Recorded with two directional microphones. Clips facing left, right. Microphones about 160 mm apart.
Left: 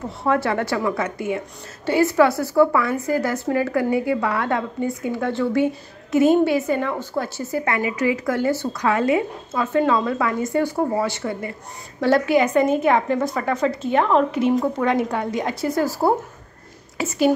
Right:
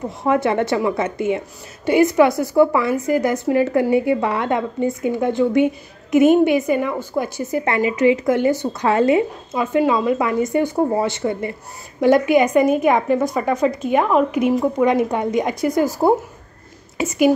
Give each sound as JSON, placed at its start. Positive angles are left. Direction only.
{"t": 0.2, "sound": "a woman's voice", "side_deg": -20}
{"t": 9.5, "sound": "a woman's voice", "side_deg": -15}